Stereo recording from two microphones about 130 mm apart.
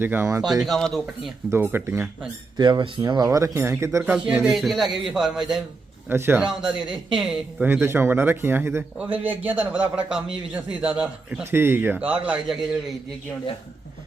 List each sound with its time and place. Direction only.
0.0 s a man's voice: 15° right (ahead or behind)
0.6 s a man's voice: centre (ahead or behind)
1.6 s a man's voice: 15° right (ahead or behind)
2.6 s speech: 35° right (ahead or behind)
4.3 s a man's voice: 5° right (ahead or behind)
6.1 s a man's voice: 15° right (ahead or behind)
6.5 s a man's voice: 5° right (ahead or behind)
6.7 s speech: 40° right (ahead or behind)
7.2 s a man's voice: 5° right (ahead or behind)
7.7 s a man's voice: 20° right (ahead or behind)